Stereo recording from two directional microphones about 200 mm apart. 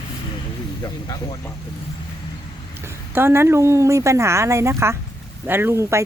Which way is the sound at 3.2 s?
10° right (ahead or behind).